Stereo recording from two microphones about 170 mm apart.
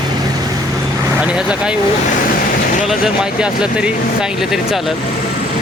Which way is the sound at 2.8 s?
5° right (ahead or behind).